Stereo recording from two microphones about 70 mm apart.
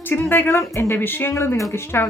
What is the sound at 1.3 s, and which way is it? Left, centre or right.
Speech, left.